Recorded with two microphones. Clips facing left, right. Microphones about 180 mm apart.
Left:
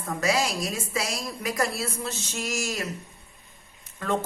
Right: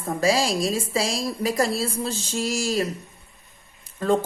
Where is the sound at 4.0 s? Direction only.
30° right (ahead or behind).